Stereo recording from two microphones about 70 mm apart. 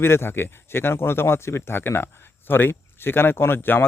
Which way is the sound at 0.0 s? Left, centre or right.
Left.